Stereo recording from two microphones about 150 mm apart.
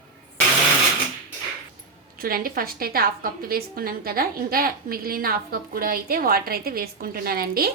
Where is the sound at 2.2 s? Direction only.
75° right (ahead or behind).